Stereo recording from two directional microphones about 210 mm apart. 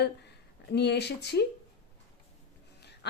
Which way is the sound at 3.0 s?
55° left (ahead or behind).